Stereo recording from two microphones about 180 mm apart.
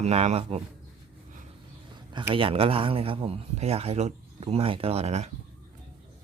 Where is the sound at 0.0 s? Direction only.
35° right (ahead or behind).